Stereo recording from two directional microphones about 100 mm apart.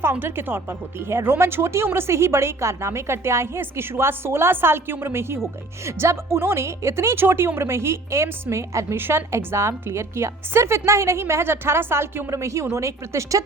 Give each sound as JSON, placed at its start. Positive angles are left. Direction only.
{"t": 0.0, "sound": "a woman's voice", "side_deg": -20}